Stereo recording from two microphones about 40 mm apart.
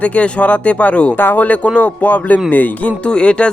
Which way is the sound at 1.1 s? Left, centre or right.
Left.